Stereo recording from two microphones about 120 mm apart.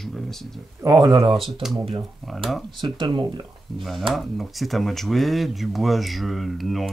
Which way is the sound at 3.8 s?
Centre (ahead or behind).